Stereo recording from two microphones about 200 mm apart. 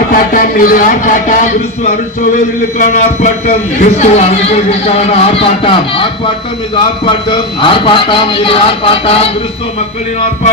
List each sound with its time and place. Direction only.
0.1 s speech: 45° left (ahead or behind)
2.7 s speech: 35° left (ahead or behind)